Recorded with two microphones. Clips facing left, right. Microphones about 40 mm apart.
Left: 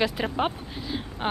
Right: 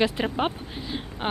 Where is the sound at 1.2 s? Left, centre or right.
Centre.